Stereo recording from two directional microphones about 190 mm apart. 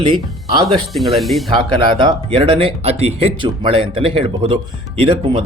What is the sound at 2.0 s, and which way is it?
Speech, 30° right (ahead or behind).